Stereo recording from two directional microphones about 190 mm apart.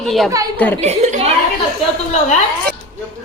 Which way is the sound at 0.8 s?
35° right (ahead or behind).